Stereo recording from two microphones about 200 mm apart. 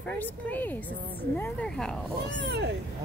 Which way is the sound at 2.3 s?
60° right (ahead or behind).